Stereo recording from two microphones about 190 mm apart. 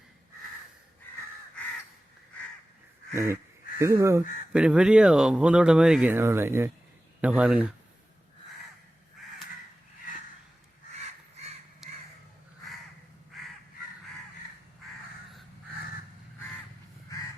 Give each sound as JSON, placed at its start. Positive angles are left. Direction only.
{"t": 3.1, "sound": "duck", "side_deg": -15}
{"t": 3.8, "sound": "speech", "side_deg": -15}
{"t": 10.9, "sound": "crow", "side_deg": -35}